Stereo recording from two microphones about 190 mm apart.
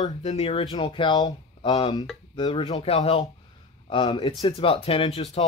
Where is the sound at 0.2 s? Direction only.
35° left (ahead or behind).